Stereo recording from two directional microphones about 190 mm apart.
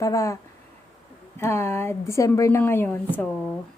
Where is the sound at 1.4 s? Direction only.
15° left (ahead or behind).